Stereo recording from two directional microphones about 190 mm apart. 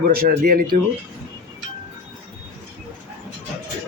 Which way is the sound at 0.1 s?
50° right (ahead or behind).